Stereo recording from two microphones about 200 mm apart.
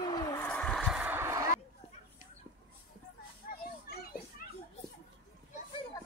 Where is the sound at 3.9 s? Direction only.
50° left (ahead or behind).